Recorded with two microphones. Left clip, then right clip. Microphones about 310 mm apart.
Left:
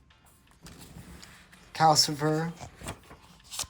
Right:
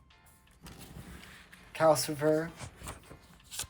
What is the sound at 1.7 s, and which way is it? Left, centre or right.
Speech, centre.